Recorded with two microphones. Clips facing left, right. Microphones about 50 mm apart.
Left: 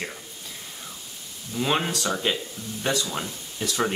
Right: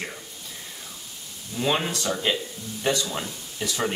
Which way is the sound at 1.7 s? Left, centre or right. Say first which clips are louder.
Even; centre.